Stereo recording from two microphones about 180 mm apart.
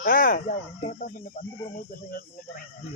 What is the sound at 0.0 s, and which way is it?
Speech, 50° left (ahead or behind).